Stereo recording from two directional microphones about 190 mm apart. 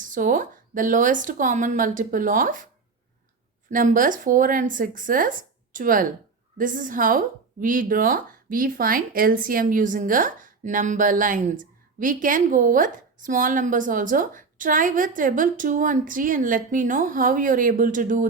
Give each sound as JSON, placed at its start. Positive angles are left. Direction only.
{"t": 0.0, "sound": "a woman's voice", "side_deg": -45}
{"t": 3.7, "sound": "a woman's voice", "side_deg": -45}